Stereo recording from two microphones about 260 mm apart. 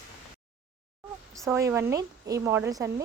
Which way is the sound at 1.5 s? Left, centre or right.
Centre.